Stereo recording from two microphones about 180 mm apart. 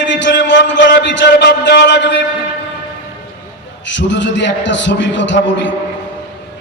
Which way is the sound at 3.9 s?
85° left.